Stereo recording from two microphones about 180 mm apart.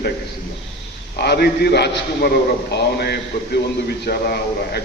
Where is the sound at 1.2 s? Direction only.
65° left (ahead or behind).